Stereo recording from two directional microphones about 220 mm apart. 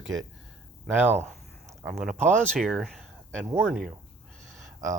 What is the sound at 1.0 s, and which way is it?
Speech, 30° right (ahead or behind).